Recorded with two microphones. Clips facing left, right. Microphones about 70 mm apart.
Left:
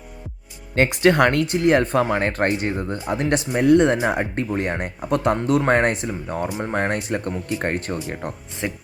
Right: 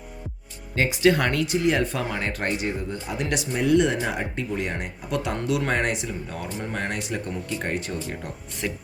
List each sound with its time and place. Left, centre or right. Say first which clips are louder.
0.8 s speech: left 4 dB; left
8.6 s speech: left 3 dB; left